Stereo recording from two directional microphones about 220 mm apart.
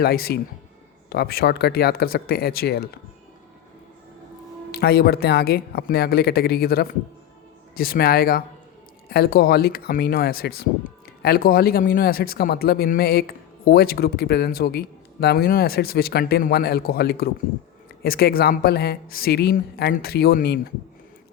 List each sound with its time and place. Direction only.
0.0 s speech: 45° left (ahead or behind)
4.7 s speech: 45° left (ahead or behind)